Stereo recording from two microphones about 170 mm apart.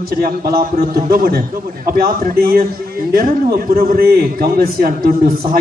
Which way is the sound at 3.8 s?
65° right (ahead or behind).